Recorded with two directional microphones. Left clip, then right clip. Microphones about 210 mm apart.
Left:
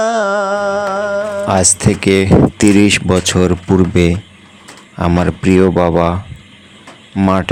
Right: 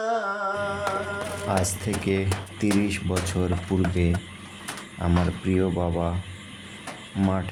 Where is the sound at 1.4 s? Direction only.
40° left (ahead or behind).